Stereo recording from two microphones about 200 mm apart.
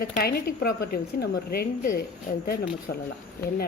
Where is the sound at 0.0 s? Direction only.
50° left (ahead or behind).